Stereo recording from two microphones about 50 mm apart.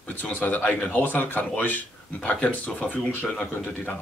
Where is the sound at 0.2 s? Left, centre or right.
Left.